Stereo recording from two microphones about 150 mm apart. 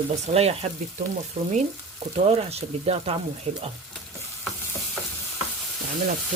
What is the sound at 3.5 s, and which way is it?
Stir, 40° right (ahead or behind).